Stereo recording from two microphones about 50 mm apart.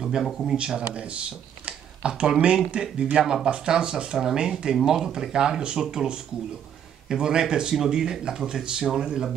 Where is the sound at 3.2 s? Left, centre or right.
Centre.